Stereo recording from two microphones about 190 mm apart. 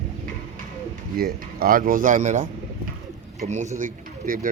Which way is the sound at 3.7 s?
45° right (ahead or behind).